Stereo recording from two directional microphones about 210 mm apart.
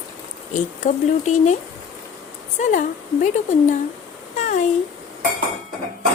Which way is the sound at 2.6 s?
35° left (ahead or behind).